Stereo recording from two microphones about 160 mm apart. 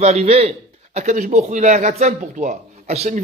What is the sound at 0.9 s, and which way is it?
Speech, 50° right (ahead or behind).